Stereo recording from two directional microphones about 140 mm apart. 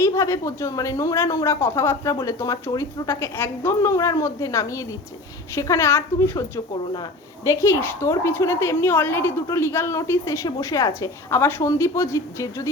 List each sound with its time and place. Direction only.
0.0 s speech: 20° left (ahead or behind)